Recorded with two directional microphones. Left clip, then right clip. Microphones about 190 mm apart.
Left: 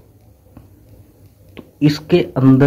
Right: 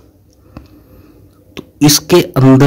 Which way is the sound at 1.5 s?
55° right (ahead or behind).